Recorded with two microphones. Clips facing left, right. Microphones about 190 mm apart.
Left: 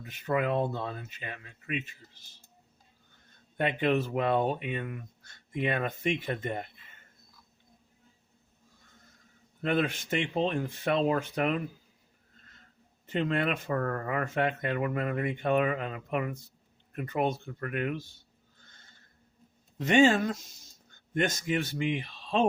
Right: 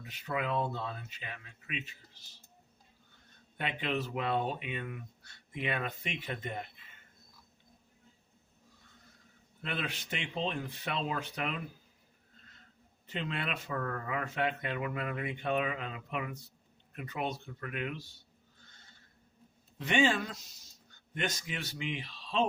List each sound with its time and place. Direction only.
0.1 s speech: 50° left (ahead or behind)
3.6 s speech: 50° left (ahead or behind)
9.6 s speech: 45° left (ahead or behind)
13.1 s speech: 50° left (ahead or behind)
19.8 s speech: 45° left (ahead or behind)